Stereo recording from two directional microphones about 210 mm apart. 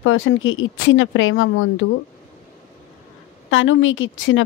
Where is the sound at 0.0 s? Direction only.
70° left (ahead or behind).